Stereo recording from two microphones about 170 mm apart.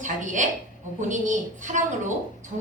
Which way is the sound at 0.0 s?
45° right (ahead or behind).